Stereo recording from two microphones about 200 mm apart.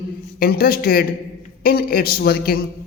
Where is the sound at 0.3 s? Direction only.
50° left (ahead or behind).